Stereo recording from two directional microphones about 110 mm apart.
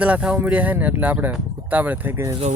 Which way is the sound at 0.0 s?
10° right (ahead or behind).